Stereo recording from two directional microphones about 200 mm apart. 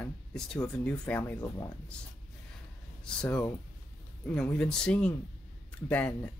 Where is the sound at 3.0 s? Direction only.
5° left (ahead or behind).